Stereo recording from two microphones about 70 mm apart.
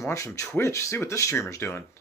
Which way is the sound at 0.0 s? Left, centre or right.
Left.